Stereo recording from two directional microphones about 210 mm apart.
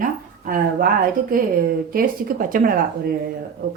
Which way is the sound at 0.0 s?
40° right (ahead or behind).